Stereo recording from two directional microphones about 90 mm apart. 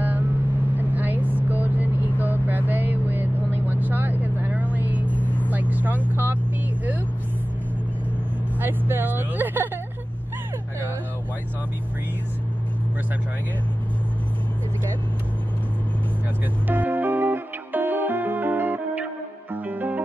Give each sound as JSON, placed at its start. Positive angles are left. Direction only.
{"t": 0.0, "sound": "vehicle", "side_deg": -20}
{"t": 5.2, "sound": "vehicle", "side_deg": 20}
{"t": 5.5, "sound": "vehicle", "side_deg": -20}
{"t": 8.5, "sound": "vehicle", "side_deg": -25}
{"t": 16.6, "sound": "music", "side_deg": -20}